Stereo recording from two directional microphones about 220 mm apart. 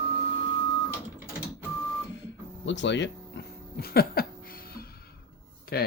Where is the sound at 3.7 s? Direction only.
45° left (ahead or behind).